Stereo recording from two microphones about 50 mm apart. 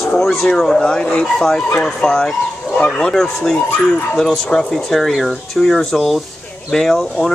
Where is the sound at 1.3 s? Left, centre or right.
Centre.